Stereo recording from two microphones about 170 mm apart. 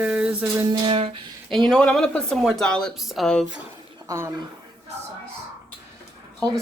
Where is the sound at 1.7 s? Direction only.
5° left (ahead or behind).